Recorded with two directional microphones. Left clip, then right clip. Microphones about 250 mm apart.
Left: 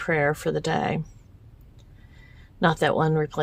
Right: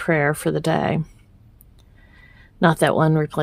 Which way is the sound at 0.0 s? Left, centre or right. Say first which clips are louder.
Right 3 dB; right.